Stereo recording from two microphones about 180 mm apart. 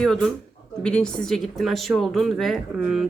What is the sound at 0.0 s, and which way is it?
A woman's voice, 5° left (ahead or behind).